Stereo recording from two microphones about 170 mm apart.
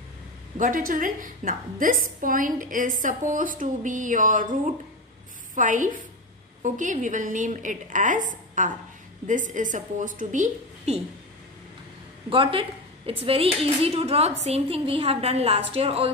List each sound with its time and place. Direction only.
0.6 s a woman's voice: 55° right (ahead or behind)
12.3 s a woman's voice: 30° right (ahead or behind)